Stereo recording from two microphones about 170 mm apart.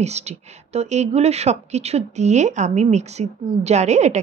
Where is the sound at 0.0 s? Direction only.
40° right (ahead or behind).